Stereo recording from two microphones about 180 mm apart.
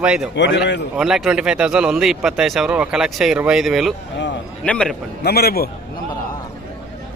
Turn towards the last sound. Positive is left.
turn(degrees=60)  # may be behind; listen again after turning